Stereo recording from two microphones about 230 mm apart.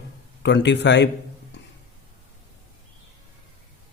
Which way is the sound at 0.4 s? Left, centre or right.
Left.